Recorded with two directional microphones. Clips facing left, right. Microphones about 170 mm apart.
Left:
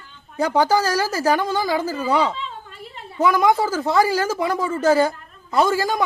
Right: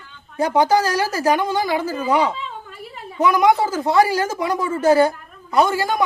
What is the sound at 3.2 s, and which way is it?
Speech, 20° right (ahead or behind).